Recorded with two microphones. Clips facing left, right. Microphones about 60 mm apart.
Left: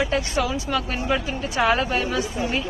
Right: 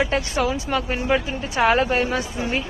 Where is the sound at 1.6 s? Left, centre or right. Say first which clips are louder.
Right 3 dB; right.